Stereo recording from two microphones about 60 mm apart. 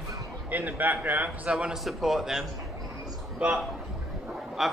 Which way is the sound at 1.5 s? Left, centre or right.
Centre.